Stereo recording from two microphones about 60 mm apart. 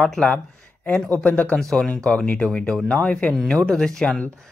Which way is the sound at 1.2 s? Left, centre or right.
Left.